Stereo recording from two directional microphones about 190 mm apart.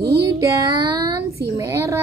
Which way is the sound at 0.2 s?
15° right (ahead or behind).